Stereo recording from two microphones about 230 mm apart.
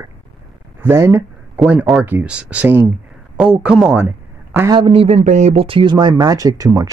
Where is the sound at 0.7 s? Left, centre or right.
Centre.